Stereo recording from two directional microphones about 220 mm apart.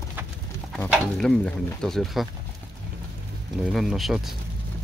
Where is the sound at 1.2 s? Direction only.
5° left (ahead or behind).